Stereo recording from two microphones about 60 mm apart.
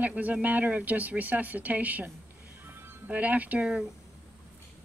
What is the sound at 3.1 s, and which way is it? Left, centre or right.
Speech, right.